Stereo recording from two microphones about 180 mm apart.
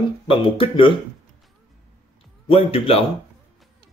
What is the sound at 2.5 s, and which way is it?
Speech, 30° left (ahead or behind).